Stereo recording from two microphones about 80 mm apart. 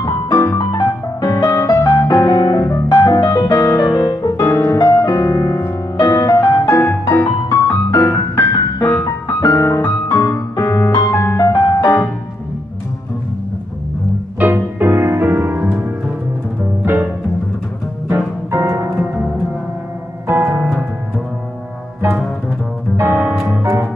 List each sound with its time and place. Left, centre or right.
0.0 s music: left
2.5 s music: left
4.4 s music: left
4.7 s music: left
14.4 s music: right
16.8 s music: right
20.2 s music: right
22.9 s music: right